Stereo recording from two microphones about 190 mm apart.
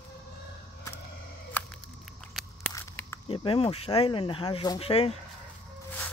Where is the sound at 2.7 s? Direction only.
15° left (ahead or behind).